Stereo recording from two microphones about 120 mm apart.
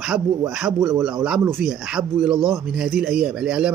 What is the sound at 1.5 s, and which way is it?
Speech, 5° right (ahead or behind).